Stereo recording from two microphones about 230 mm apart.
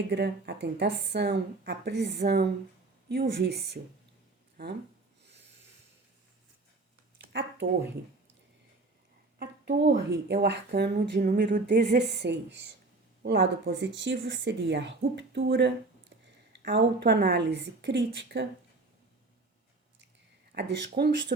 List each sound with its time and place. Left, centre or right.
0.1 s speech: right
7.2 s speech: right
9.4 s speech: right
20.5 s speech: right